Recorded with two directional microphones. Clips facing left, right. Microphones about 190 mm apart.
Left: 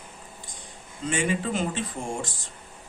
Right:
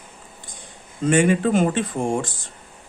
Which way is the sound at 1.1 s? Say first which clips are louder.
Right 9 dB; 55° right (ahead or behind).